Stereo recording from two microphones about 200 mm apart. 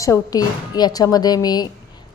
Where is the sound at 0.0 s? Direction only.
15° left (ahead or behind).